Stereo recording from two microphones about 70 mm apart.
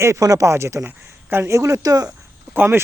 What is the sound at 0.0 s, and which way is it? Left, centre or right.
Speech, right.